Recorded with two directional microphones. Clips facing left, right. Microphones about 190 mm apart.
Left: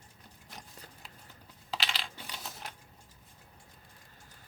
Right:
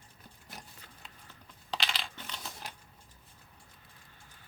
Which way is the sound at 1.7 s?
Centre (ahead or behind).